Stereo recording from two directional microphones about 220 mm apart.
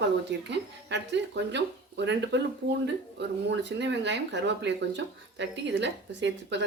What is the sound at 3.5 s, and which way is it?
Speech, 50° right (ahead or behind).